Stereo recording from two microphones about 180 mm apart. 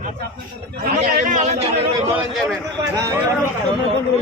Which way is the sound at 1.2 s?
45° right (ahead or behind).